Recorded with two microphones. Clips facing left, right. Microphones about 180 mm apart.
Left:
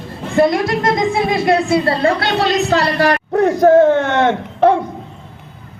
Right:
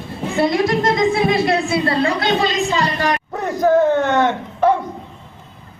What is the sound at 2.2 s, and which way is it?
A man's voice, 75° left (ahead or behind).